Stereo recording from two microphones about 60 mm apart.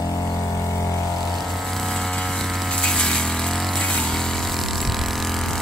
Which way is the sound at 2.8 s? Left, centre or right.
Centre.